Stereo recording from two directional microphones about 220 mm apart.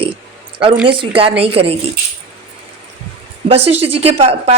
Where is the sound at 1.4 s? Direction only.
25° right (ahead or behind).